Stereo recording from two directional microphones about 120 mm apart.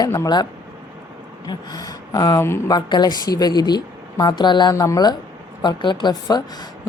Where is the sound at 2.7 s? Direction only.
35° left (ahead or behind).